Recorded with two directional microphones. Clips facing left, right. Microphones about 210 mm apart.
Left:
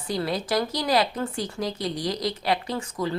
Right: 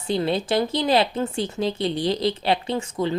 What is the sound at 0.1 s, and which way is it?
Speech, 25° right (ahead or behind).